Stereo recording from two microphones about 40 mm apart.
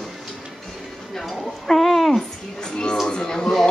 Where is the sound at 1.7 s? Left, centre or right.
Centre.